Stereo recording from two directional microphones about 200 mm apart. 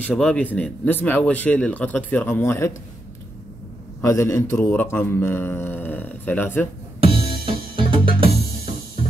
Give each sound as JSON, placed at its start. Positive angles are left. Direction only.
{"t": 0.1, "sound": "speech", "side_deg": 5}
{"t": 4.0, "sound": "speech", "side_deg": 15}
{"t": 7.0, "sound": "music", "side_deg": -25}